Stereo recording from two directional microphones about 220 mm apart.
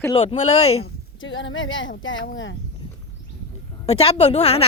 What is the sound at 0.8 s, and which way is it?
Speech, 60° left (ahead or behind).